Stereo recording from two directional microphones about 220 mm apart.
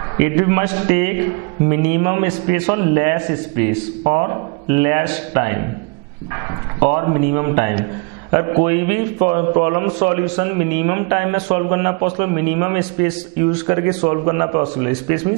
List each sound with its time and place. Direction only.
0.2 s a man's voice: 15° right (ahead or behind)
6.9 s a man's voice: 20° right (ahead or behind)